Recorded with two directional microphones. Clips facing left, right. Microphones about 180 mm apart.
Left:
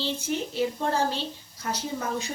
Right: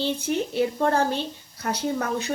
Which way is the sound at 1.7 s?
65° right (ahead or behind).